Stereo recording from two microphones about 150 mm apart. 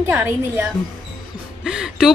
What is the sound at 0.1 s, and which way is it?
Speech, 15° right (ahead or behind).